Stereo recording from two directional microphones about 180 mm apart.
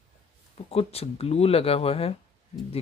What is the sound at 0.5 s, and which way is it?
Speech, 35° left (ahead or behind).